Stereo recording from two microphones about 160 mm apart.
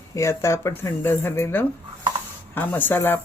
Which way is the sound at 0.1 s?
20° left (ahead or behind).